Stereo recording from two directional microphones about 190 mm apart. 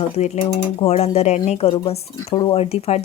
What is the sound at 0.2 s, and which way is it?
Speech, 35° left (ahead or behind).